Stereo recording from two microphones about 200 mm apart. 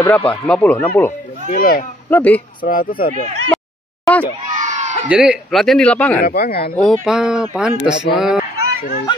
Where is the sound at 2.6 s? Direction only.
45° left (ahead or behind).